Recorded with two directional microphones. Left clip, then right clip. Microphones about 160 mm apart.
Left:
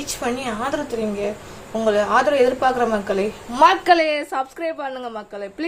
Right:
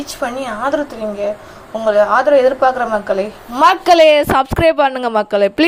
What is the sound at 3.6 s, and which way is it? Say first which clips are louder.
A woman's voice: right 6 dB; 35° right (ahead or behind).